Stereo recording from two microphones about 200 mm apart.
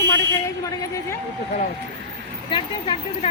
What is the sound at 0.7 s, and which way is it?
Speech, 15° left (ahead or behind).